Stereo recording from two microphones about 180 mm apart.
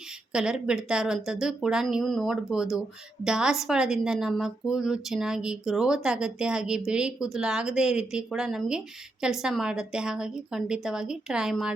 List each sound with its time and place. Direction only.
0.3 s a woman's voice: 5° right (ahead or behind)